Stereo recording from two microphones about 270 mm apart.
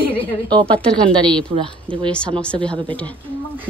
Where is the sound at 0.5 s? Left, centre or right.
Centre.